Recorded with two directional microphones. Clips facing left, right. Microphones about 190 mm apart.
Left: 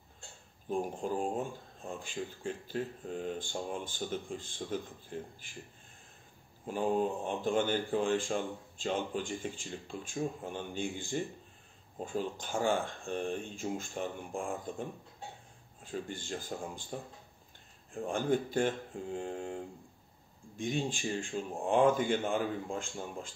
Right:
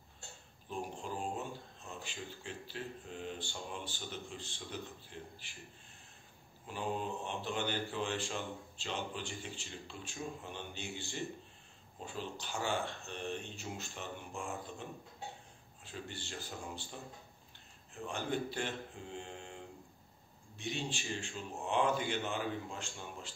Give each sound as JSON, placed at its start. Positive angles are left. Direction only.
{"t": 0.7, "sound": "speech", "side_deg": 50}
{"t": 6.6, "sound": "speech", "side_deg": 45}